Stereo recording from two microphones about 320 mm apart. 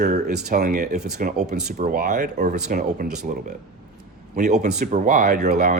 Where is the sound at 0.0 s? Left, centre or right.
Right.